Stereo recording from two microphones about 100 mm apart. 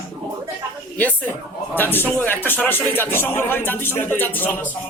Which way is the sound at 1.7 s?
20° left (ahead or behind).